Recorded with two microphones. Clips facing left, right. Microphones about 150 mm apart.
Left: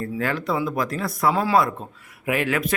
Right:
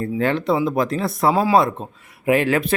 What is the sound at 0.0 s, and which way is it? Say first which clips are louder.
Speech: right 5 dB; 25° right (ahead or behind).